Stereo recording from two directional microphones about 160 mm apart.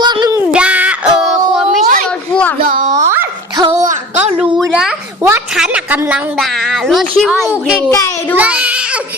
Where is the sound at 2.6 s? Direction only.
60° right (ahead or behind).